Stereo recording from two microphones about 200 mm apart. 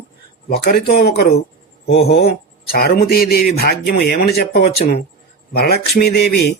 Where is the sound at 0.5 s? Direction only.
45° left (ahead or behind).